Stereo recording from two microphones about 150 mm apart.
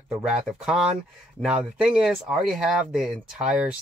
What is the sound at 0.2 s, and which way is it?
Speech, 5° right (ahead or behind).